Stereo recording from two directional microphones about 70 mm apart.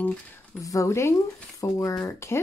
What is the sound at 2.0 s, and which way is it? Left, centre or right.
Speech, left.